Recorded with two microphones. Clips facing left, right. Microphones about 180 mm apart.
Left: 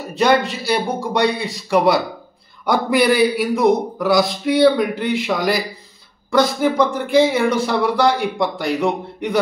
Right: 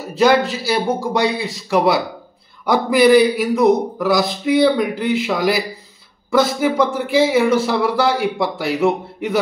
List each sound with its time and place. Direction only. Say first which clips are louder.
0.0 s speech: right 2 dB; centre (ahead or behind)